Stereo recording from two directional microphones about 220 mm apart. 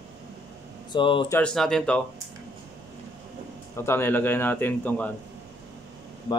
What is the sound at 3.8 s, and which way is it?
A man's voice, 10° left (ahead or behind).